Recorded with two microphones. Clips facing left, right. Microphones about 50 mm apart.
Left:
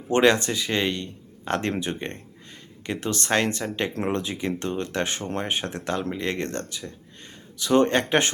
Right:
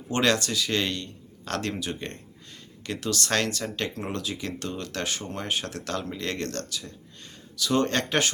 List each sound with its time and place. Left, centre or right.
0.1 s a man's voice: left